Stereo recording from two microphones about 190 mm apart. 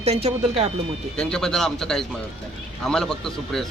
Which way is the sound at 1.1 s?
5° left (ahead or behind).